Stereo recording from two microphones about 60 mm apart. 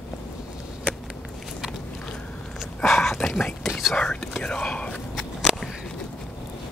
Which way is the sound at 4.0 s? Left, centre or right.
Centre.